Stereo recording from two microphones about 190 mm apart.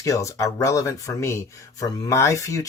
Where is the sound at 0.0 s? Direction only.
15° left (ahead or behind).